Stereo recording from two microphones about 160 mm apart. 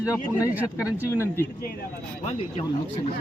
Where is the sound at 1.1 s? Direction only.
15° left (ahead or behind).